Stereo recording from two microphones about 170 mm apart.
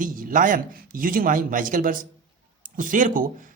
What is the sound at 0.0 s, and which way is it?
A man's voice, 50° right (ahead or behind).